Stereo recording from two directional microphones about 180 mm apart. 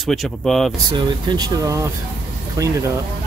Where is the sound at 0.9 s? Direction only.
25° right (ahead or behind).